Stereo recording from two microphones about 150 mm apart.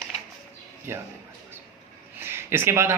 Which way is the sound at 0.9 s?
15° right (ahead or behind).